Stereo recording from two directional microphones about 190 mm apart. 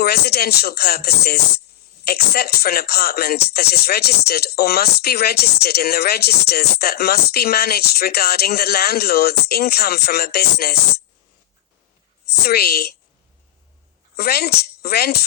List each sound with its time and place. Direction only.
0.0 s speech: 55° left (ahead or behind)
12.4 s speech: 55° left (ahead or behind)
14.2 s speech: 55° left (ahead or behind)